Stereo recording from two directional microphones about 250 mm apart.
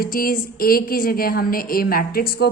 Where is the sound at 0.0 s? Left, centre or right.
Left.